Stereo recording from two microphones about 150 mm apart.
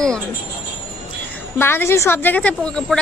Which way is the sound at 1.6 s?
15° left (ahead or behind).